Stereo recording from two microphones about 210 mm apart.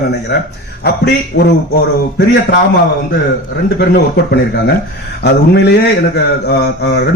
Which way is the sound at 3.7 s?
50° left (ahead or behind).